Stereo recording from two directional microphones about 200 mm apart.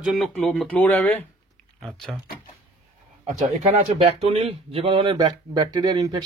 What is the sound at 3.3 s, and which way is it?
Speech, 35° right (ahead or behind).